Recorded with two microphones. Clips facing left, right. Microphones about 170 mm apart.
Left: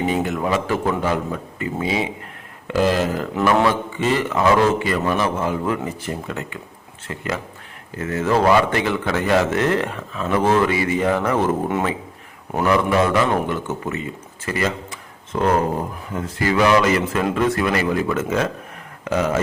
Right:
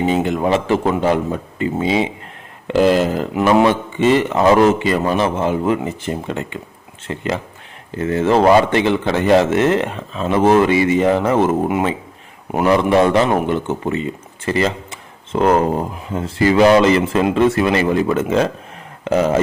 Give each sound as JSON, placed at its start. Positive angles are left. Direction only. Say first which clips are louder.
{"t": 0.1, "sound": "speech", "louder": "right 4 dB", "side_deg": -25}
{"t": 14.4, "sound": "a sound", "louder": "right 5 dB", "side_deg": -30}
{"t": 16.0, "sound": "speech", "louder": "right 7 dB", "side_deg": -25}